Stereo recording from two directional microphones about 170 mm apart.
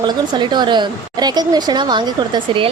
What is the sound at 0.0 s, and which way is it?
A woman's voice, 25° right (ahead or behind).